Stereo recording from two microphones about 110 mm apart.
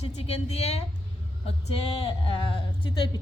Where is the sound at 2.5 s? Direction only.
55° left (ahead or behind).